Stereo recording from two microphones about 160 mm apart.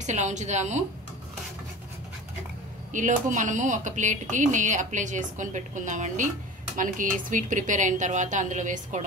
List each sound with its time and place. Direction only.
0.0 s speech: 45° right (ahead or behind)
2.9 s speech: 50° right (ahead or behind)